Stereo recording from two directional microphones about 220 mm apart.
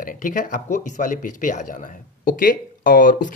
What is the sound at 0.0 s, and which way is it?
Speech, 35° left (ahead or behind).